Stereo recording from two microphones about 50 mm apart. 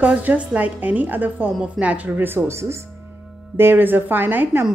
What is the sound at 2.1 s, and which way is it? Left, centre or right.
Speech, right.